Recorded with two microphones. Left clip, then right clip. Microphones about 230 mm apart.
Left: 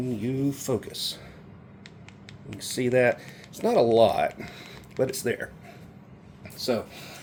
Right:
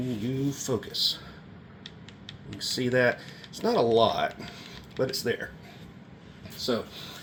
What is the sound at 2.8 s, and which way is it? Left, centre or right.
Speech, left.